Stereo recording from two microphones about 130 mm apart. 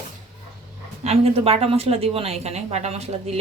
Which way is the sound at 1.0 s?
50° right (ahead or behind).